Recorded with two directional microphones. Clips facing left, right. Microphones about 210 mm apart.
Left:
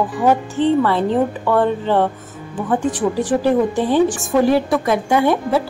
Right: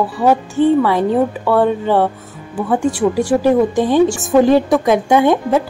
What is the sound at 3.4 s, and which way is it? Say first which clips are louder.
A woman's voice: right 3 dB; 15° right (ahead or behind).